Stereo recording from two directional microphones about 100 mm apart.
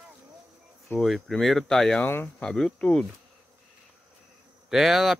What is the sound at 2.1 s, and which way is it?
Speech, 20° left (ahead or behind).